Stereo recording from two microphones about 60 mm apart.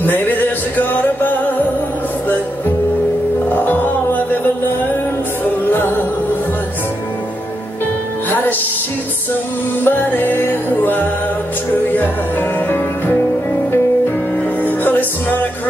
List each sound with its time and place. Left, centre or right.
0.0 s music: left
3.4 s music: left
5.7 s music: left
8.3 s music: left
9.8 s music: left
14.6 s music: left